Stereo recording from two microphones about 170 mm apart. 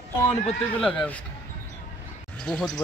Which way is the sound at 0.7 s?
5° left (ahead or behind).